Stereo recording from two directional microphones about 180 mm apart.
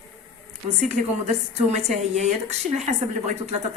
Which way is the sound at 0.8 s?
35° right (ahead or behind).